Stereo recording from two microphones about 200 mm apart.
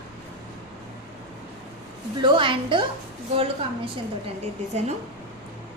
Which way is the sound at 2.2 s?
25° right (ahead or behind).